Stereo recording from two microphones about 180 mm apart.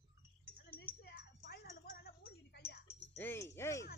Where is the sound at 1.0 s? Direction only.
65° left (ahead or behind).